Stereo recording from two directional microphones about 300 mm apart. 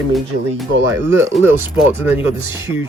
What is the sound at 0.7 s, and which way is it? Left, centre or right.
Speech, right.